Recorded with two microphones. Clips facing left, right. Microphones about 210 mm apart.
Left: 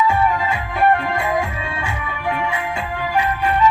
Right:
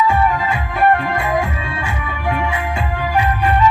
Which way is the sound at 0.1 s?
10° left (ahead or behind).